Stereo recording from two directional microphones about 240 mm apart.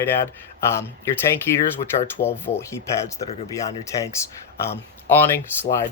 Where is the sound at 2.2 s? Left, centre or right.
Left.